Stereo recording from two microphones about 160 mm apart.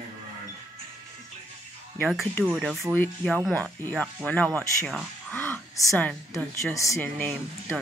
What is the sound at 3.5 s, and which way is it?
Speech, 10° left (ahead or behind).